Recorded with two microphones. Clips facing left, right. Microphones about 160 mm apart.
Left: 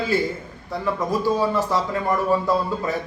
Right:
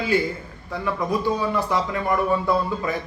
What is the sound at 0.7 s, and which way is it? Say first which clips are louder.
A man's voice: left 1 dB; 35° left (ahead or behind).